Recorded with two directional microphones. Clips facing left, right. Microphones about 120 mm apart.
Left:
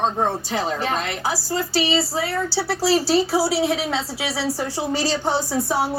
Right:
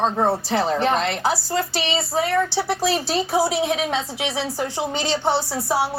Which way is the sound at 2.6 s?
20° right (ahead or behind).